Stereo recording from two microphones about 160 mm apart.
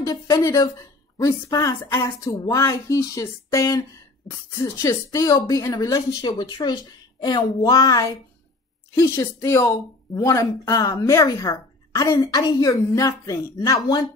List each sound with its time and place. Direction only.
0.0 s speech: 20° left (ahead or behind)